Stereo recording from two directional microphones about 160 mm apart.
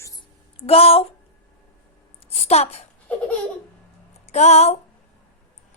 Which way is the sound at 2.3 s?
40° left (ahead or behind).